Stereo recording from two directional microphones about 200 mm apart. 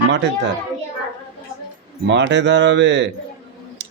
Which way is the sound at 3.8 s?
60° right (ahead or behind).